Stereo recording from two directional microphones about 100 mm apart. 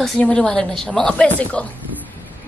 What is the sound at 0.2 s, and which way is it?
A woman's voice, 10° left (ahead or behind).